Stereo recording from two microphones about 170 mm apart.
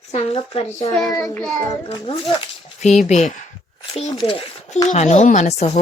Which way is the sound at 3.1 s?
45° left (ahead or behind).